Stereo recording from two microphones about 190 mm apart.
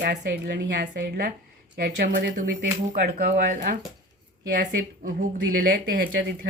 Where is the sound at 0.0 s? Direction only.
60° right (ahead or behind).